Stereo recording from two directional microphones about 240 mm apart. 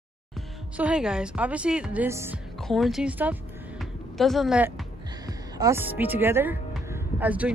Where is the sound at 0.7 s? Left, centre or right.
Centre.